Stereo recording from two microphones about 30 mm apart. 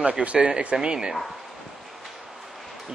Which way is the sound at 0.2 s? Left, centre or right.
Right.